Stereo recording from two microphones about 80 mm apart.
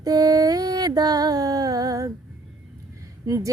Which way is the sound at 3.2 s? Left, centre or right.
Right.